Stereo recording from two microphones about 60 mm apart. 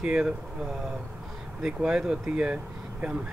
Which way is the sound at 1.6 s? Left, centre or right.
Centre.